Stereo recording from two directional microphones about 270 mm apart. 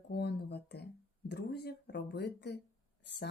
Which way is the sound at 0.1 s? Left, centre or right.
Left.